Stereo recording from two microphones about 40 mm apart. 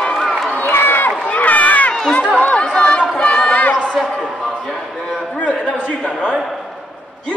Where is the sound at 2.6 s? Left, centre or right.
Left.